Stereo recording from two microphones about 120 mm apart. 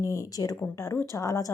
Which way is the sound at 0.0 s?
25° left (ahead or behind).